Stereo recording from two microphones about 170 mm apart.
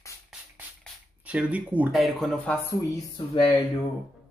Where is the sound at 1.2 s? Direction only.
10° right (ahead or behind); by 2.7 s 10° left (ahead or behind).